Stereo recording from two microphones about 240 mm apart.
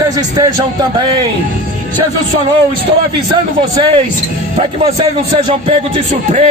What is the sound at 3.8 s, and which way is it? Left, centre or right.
Speech, right.